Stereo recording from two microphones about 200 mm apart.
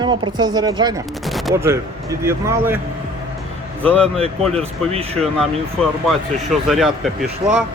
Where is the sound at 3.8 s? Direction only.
5° left (ahead or behind).